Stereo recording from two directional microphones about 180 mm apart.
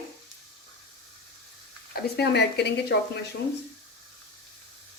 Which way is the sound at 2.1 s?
65° left (ahead or behind).